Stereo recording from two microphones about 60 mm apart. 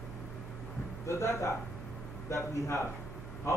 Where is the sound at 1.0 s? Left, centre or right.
Left.